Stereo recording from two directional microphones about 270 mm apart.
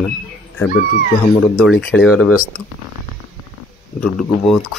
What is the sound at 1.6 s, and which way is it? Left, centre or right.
Speech, centre.